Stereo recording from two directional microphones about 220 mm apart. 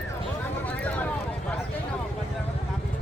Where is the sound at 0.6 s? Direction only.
5° left (ahead or behind).